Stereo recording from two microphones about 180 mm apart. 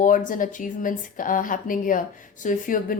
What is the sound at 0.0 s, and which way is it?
A woman's voice, 45° left (ahead or behind).